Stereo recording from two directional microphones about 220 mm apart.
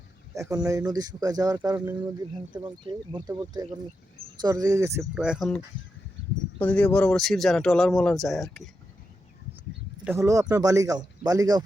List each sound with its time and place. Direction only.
0.3 s speech: 15° right (ahead or behind)
10.0 s speech: 10° right (ahead or behind)